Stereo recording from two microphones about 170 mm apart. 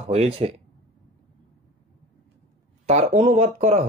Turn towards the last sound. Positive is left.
turn(degrees=-45)  # may be behind; listen again after turning